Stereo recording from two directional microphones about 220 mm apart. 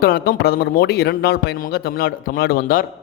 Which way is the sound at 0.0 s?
45° left (ahead or behind).